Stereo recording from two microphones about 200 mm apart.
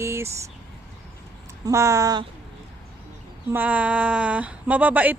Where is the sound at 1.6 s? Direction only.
15° right (ahead or behind).